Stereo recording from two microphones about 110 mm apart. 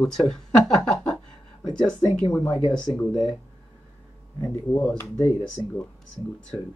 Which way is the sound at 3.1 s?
50° left (ahead or behind).